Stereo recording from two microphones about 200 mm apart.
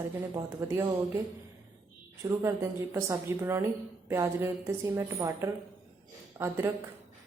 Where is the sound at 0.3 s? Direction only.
15° right (ahead or behind).